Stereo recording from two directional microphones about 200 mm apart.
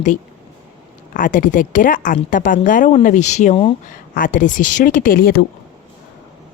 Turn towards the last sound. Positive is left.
turn(degrees=50)  # may be behind; listen again after turning